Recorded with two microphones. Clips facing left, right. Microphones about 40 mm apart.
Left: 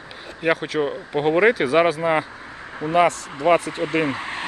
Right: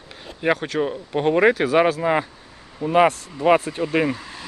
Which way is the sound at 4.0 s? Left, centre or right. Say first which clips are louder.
Even; left.